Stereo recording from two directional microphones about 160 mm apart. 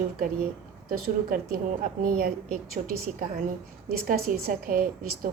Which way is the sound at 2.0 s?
60° right (ahead or behind).